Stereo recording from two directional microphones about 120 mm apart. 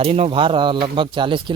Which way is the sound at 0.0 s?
55° right (ahead or behind).